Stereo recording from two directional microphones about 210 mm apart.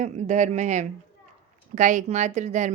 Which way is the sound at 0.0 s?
35° right (ahead or behind).